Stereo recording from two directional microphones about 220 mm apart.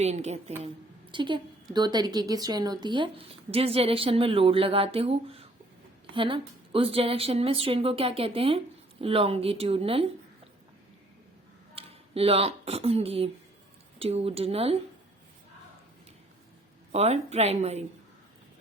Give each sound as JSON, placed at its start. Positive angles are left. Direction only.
{"t": 0.0, "sound": "a woman's voice", "side_deg": -30}
{"t": 11.7, "sound": "a woman's voice", "side_deg": -25}
{"t": 16.9, "sound": "a woman's voice", "side_deg": -30}